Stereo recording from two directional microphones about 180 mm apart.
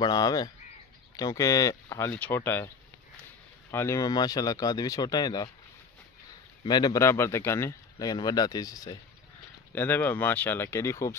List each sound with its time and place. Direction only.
0.0 s speech: 20° left (ahead or behind)
3.7 s speech: 15° left (ahead or behind)
6.6 s speech: 25° left (ahead or behind)